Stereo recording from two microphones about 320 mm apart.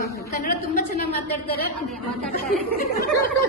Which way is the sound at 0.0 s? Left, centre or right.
Left.